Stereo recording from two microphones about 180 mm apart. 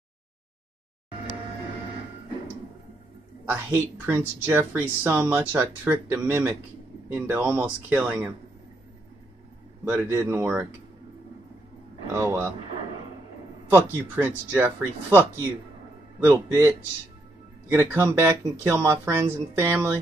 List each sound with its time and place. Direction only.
3.4 s speech: 10° right (ahead or behind)
9.8 s speech: 10° right (ahead or behind)
12.2 s speech: 10° right (ahead or behind)
13.7 s speech: 10° right (ahead or behind)
16.3 s speech: 15° right (ahead or behind)